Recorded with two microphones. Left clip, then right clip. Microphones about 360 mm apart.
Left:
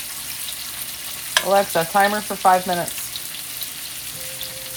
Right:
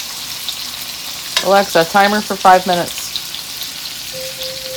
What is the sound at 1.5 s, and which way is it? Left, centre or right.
Stir, right.